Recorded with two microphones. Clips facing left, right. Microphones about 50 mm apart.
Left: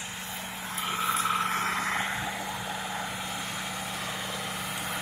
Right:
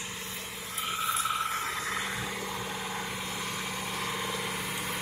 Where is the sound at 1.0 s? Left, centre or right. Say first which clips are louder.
Left 3 dB; left.